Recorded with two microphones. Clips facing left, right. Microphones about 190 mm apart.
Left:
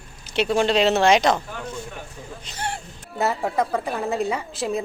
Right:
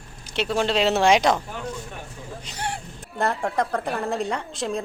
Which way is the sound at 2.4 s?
15° right (ahead or behind).